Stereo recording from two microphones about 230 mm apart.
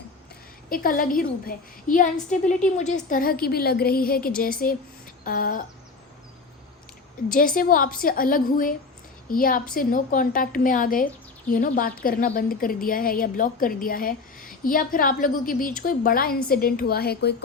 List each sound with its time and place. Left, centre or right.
0.7 s a woman's voice: left
7.3 s a woman's voice: left